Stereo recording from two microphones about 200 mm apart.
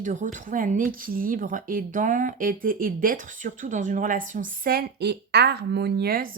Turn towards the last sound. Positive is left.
turn(degrees=-50)  # may be behind; listen again after turning